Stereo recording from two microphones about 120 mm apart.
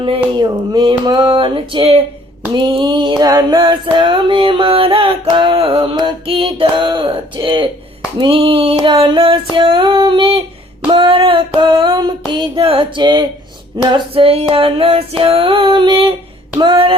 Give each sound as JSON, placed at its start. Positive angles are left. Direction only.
{"t": 0.3, "sound": "music", "side_deg": -35}
{"t": 2.5, "sound": "music", "side_deg": -35}
{"t": 10.9, "sound": "a sound", "side_deg": -45}
{"t": 12.6, "sound": "music", "side_deg": -50}
{"t": 13.9, "sound": "music", "side_deg": -50}